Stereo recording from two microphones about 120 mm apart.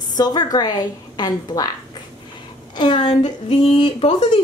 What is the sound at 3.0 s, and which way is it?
Speech, 55° left (ahead or behind).